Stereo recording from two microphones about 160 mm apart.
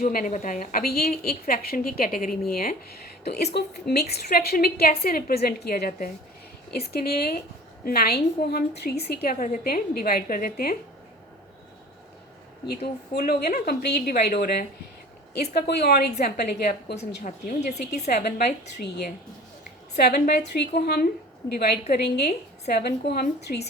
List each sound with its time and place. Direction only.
0.0 s a woman's voice: 60° left (ahead or behind)
12.6 s a woman's voice: 80° left
15.4 s a woman's voice: 90° left
16.2 s a woman's voice: 75° left (ahead or behind)
17.2 s a woman's voice: 50° left (ahead or behind)
20.0 s a woman's voice: 80° left
20.5 s a woman's voice: 85° left
23.5 s a woman's voice: 65° left (ahead or behind)